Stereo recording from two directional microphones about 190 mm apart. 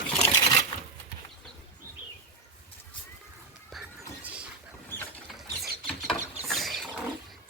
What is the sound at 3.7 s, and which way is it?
Music, 5° right (ahead or behind).